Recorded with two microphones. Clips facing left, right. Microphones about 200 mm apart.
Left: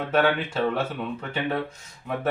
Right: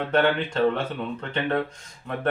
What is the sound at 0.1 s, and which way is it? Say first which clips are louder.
Speech: even; 5° left (ahead or behind).